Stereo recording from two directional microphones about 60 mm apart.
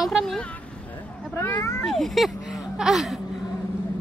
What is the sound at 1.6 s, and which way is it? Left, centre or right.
Speech, left.